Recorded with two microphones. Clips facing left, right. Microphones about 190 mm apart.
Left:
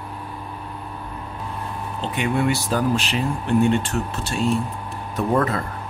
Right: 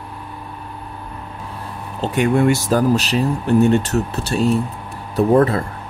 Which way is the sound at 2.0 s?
45° right (ahead or behind).